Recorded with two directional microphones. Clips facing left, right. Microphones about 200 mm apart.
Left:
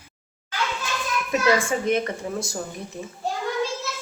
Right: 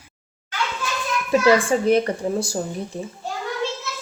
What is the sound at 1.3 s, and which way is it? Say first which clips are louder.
A woman's voice: right 5 dB; 30° right (ahead or behind).